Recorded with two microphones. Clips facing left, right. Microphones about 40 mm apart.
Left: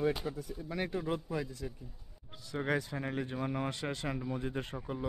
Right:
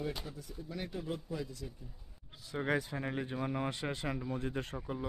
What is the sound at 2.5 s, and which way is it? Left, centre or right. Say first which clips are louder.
Speech: even; centre.